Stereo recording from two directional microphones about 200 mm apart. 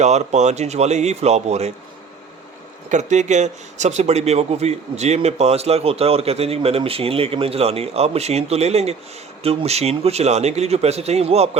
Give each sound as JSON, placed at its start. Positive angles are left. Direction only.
{"t": 0.0, "sound": "speech", "side_deg": -35}
{"t": 2.9, "sound": "speech", "side_deg": -35}